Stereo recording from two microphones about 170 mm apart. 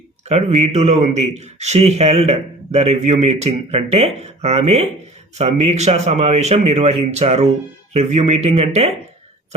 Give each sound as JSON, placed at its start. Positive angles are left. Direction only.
{"t": 0.3, "sound": "a man's voice", "side_deg": -40}